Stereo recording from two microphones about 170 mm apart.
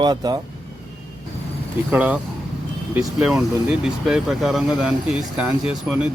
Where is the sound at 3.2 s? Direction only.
5° right (ahead or behind).